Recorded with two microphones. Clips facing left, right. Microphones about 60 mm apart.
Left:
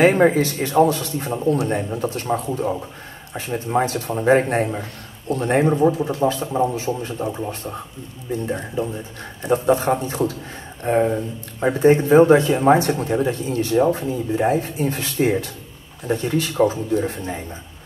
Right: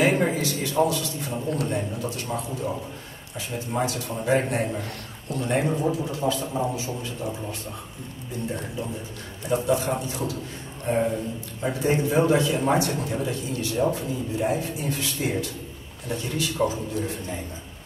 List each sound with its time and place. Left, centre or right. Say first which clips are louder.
0.0 s a man's voice: left 7 dB; left